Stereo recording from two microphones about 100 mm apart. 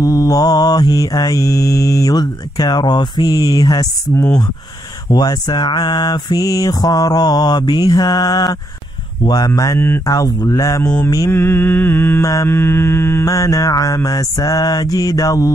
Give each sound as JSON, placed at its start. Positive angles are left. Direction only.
{"t": 0.0, "sound": "mantra", "side_deg": 35}
{"t": 5.1, "sound": "mantra", "side_deg": 45}
{"t": 9.2, "sound": "speech", "side_deg": 45}
{"t": 9.5, "sound": "mantra", "side_deg": 35}
{"t": 11.3, "sound": "a sound", "side_deg": 20}
{"t": 12.2, "sound": "a sound", "side_deg": 30}
{"t": 13.0, "sound": "mantra", "side_deg": 35}